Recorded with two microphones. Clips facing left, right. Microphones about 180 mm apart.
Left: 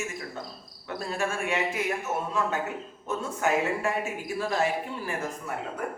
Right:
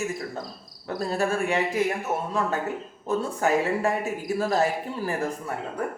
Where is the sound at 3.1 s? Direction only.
35° right (ahead or behind).